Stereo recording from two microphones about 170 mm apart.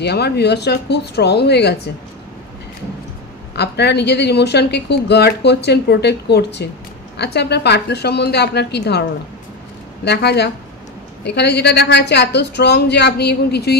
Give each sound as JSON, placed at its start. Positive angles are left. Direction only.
{"t": 0.0, "sound": "a woman's voice", "side_deg": 75}
{"t": 3.5, "sound": "a woman's voice", "side_deg": 75}
{"t": 10.0, "sound": "a woman's voice", "side_deg": 80}